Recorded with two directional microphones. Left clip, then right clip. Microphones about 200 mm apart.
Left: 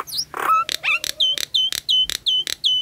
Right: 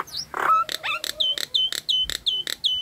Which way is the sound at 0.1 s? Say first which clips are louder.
Left 2 dB; 20° left (ahead or behind).